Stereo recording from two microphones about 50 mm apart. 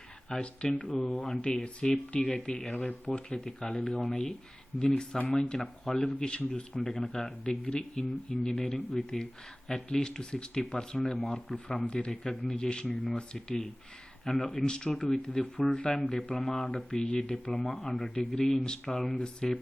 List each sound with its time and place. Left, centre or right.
0.3 s speech: centre
2.6 s speech: centre
3.1 s speech: centre
4.7 s speech: centre
5.3 s speech: centre
6.1 s speech: centre
12.3 s speech: centre
12.5 s speech: centre
14.3 s speech: centre
16.4 s speech: centre
16.7 s speech: centre